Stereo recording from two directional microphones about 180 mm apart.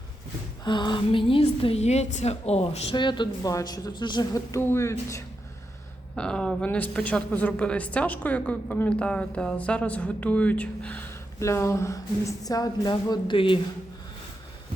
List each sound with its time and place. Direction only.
0.6 s a woman's voice: 25° left (ahead or behind)
6.1 s a woman's voice: 5° left (ahead or behind); by 13.6 s 30° left (ahead or behind)